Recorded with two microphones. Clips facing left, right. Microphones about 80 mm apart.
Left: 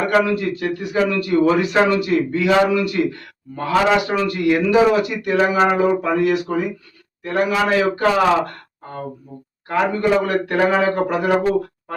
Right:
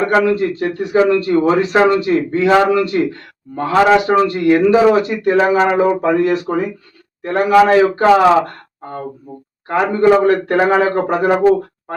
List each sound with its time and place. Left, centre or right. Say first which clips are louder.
0.0 s a man's voice: right 4 dB; right
9.6 s a man's voice: right 5 dB; right